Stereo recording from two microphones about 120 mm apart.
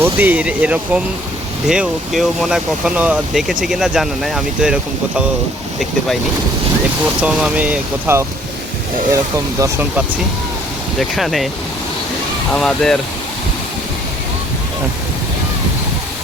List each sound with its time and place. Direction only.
0.0 s speech: 15° right (ahead or behind)
7.2 s speech: 10° right (ahead or behind)
9.1 s speech: 25° right (ahead or behind)
11.1 s speech: centre (ahead or behind)
12.5 s speech: 5° left (ahead or behind)